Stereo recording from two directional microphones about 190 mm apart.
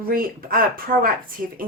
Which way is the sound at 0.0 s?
50° right (ahead or behind).